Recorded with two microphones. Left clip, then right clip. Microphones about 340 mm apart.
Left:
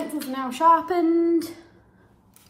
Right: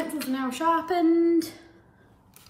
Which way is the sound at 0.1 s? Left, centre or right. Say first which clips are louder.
Left 1 dB; centre.